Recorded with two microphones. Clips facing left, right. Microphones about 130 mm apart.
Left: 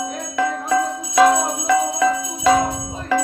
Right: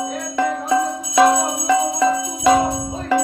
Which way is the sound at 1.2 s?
10° right (ahead or behind).